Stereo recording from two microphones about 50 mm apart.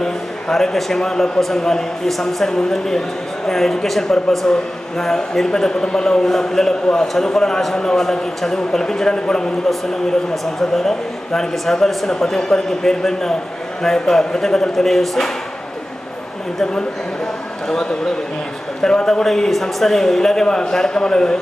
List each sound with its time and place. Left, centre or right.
0.0 s a man's voice: centre
18.8 s a man's voice: centre